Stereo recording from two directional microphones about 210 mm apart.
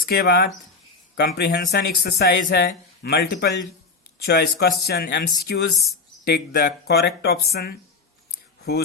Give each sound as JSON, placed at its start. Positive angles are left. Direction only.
{"t": 0.0, "sound": "speech", "side_deg": 50}